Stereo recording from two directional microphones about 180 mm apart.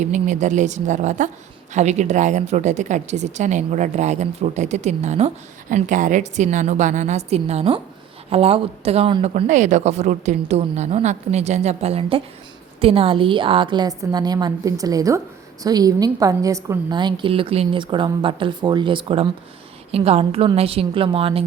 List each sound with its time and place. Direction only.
0.0 s a woman's voice: 40° right (ahead or behind)